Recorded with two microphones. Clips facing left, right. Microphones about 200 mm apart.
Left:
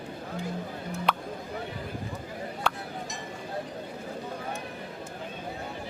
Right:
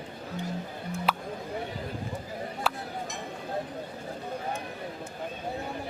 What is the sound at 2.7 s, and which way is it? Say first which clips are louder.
Music: left 1 dB; 5° right (ahead or behind).